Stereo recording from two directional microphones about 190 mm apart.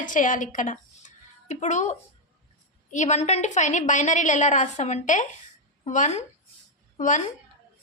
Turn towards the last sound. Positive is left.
turn(degrees=40)  # may be behind; listen again after turning